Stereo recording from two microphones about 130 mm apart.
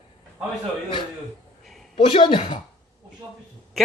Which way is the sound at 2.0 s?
40° left (ahead or behind).